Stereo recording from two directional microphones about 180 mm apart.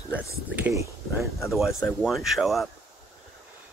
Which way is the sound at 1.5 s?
Centre (ahead or behind).